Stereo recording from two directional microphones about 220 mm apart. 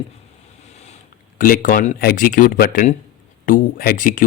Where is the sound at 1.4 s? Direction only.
40° left (ahead or behind).